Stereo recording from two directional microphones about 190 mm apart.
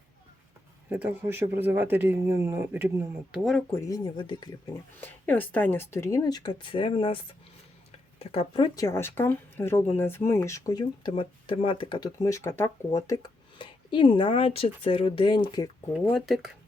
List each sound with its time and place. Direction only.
0.9 s speech: 10° right (ahead or behind)
3.3 s speech: centre (ahead or behind)
3.8 s speech: 20° left (ahead or behind)
4.9 s speech: 10° left (ahead or behind)
16.0 s speech: centre (ahead or behind)